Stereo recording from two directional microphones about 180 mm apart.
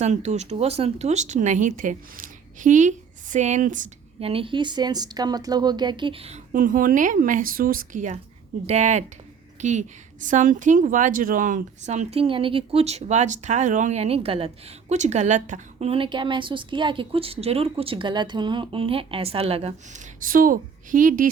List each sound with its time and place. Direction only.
0.0 s speech: 40° right (ahead or behind)
4.3 s a woman's voice: 30° right (ahead or behind)
20.2 s a woman's voice: 50° right (ahead or behind)